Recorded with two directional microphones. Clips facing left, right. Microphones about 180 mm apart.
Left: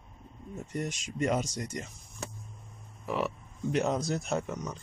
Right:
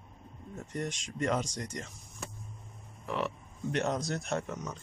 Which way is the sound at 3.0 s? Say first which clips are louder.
Left 2 dB; 5° left (ahead or behind).